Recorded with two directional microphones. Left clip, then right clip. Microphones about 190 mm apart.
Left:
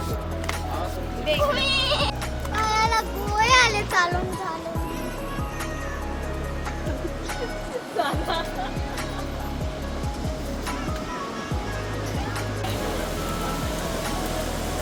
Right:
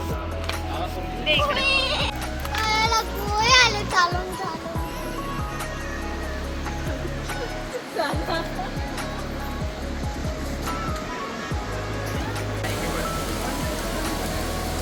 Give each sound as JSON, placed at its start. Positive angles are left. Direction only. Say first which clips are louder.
{"t": 1.3, "sound": "music", "louder": "right 1 dB", "side_deg": 60}
{"t": 2.6, "sound": "children playing", "louder": "right 1 dB", "side_deg": 5}